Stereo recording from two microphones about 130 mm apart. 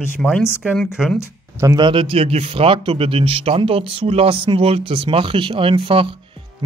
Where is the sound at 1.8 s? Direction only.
40° right (ahead or behind).